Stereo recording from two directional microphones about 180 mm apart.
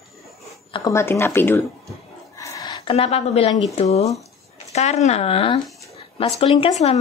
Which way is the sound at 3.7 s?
35° left (ahead or behind).